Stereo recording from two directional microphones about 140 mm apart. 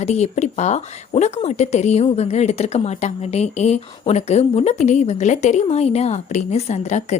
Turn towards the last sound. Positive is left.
turn(degrees=55)  # may be behind; listen again after turning